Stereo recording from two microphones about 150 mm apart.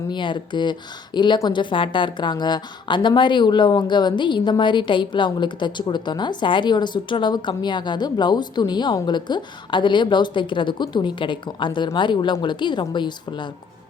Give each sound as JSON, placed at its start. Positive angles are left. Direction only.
{"t": 0.1, "sound": "speech", "side_deg": 30}